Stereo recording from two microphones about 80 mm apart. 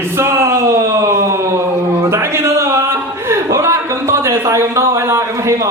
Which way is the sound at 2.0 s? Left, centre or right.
Right.